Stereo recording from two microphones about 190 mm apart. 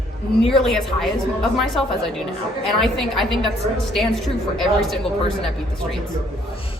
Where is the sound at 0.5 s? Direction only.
Centre (ahead or behind).